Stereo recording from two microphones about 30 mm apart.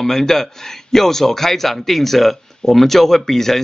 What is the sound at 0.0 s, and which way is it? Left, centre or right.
A man's voice, centre.